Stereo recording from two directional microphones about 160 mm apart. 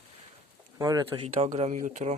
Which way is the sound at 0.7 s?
20° right (ahead or behind).